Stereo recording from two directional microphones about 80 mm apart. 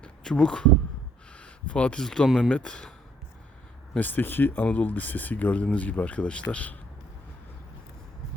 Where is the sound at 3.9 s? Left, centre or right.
Left.